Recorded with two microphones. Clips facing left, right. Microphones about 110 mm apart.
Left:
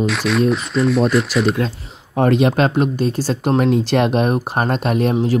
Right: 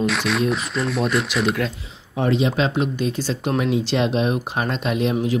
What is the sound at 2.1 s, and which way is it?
Speech, 55° left (ahead or behind).